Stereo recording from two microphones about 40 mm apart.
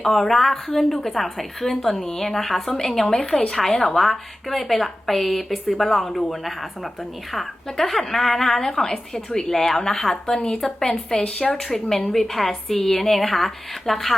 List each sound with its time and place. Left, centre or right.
0.1 s speech: centre
3.2 s speech: centre
3.5 s speech: centre
11.6 s speech: centre